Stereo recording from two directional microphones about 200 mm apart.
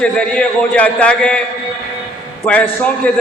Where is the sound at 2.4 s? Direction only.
5° left (ahead or behind).